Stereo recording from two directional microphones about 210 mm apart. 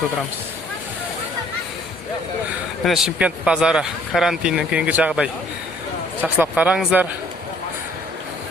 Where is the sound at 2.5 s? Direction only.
Centre (ahead or behind).